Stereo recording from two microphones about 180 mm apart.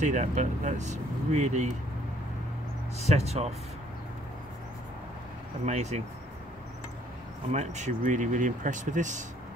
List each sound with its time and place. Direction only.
0.0 s speech: 40° right (ahead or behind)
3.0 s speech: 35° right (ahead or behind)
5.7 s speech: 40° right (ahead or behind)
7.5 s speech: 40° right (ahead or behind)